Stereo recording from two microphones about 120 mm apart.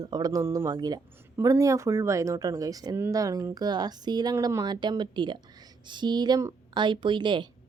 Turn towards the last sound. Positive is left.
turn(degrees=-40)  # may be behind; listen again after turning